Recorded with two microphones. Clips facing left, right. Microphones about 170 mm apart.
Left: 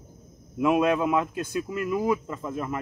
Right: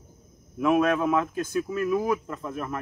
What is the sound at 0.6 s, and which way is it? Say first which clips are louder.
Speech: even; 15° left (ahead or behind).